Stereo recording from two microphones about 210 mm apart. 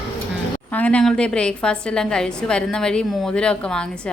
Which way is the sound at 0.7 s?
5° left (ahead or behind).